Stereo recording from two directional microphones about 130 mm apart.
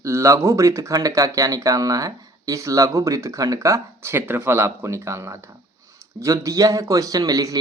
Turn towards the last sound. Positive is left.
turn(degrees=-25)  # may be behind; listen again after turning